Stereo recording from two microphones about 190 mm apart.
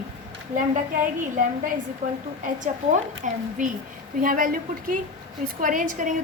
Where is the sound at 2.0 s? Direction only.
50° right (ahead or behind).